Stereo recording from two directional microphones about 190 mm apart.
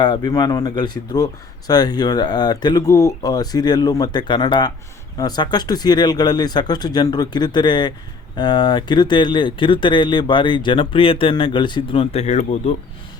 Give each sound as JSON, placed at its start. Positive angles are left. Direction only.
{"t": 0.0, "sound": "speech", "side_deg": 20}